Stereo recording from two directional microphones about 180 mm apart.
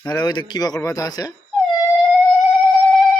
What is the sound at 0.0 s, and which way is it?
Speech, 20° left (ahead or behind).